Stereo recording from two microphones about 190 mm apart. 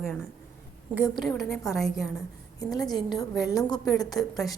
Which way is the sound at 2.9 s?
Centre (ahead or behind).